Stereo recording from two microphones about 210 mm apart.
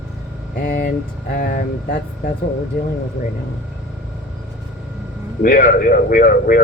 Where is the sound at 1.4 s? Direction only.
40° left (ahead or behind).